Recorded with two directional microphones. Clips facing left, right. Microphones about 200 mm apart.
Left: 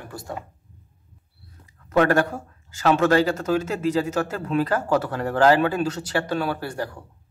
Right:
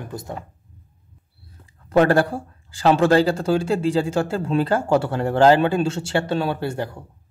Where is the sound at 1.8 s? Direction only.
30° right (ahead or behind).